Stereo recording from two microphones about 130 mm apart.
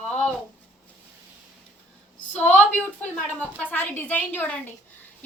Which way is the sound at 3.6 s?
15° left (ahead or behind).